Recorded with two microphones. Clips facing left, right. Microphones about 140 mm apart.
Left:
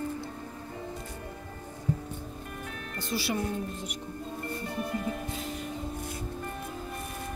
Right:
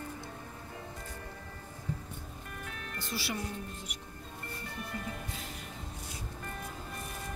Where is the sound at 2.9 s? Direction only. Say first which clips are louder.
Left 7 dB; 20° left (ahead or behind).